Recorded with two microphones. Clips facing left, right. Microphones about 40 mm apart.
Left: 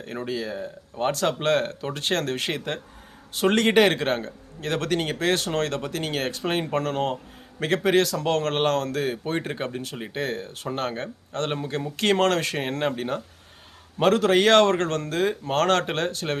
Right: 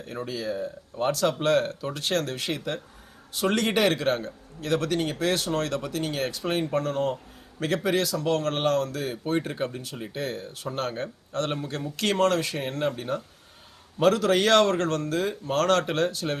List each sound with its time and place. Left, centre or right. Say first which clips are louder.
0.0 s a man's voice: left 2 dB; left
1.1 s a man's voice: even; left
9.2 s a man's voice: right 1 dB; left
10.7 s a man's voice: left 1 dB; left
12.1 s speech: left 1 dB; left
12.8 s a man's voice: left 2 dB; left